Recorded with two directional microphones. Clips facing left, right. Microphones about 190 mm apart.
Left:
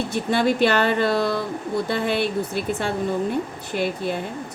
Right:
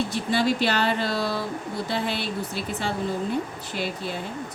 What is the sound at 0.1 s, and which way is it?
Speech, 55° left (ahead or behind).